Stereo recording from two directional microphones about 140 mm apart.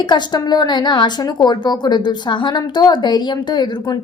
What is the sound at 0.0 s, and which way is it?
A woman's voice, 30° left (ahead or behind).